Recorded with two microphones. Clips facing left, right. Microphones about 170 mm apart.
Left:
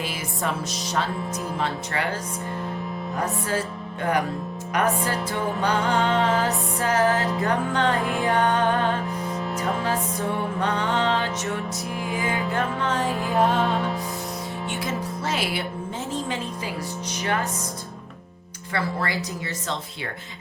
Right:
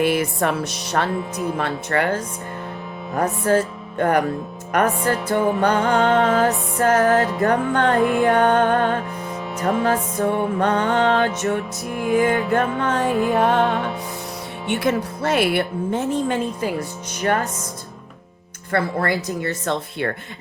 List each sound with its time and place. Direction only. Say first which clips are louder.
0.3 s music: right 6 dB; 65° right (ahead or behind)
5.7 s music: right 5 dB; 45° right (ahead or behind)
7.9 s music: right 8 dB; centre (ahead or behind)
8.3 s music: right 1 dB; 45° right (ahead or behind)
10.2 s music: right 6 dB; 50° right (ahead or behind)
13.1 s music: right 7 dB; centre (ahead or behind)
13.3 s music: left 1 dB; 65° right (ahead or behind)
16.3 s music: right 7 dB; 50° right (ahead or behind)
18.7 s music: right 6 dB; 55° right (ahead or behind)